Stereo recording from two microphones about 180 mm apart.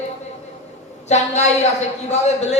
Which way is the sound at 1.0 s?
40° left (ahead or behind).